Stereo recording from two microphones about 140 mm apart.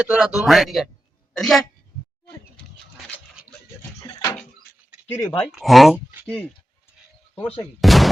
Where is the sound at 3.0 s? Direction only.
5° left (ahead or behind).